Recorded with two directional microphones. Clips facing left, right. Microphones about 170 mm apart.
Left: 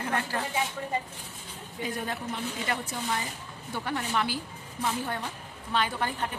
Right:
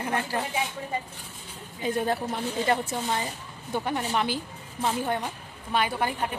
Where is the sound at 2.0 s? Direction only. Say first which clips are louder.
Right 6 dB; 35° right (ahead or behind).